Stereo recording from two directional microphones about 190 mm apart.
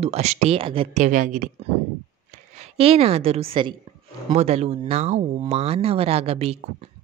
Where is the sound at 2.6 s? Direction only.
30° right (ahead or behind).